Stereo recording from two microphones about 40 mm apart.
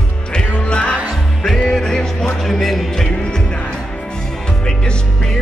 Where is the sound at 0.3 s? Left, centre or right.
Left; by 3.1 s centre.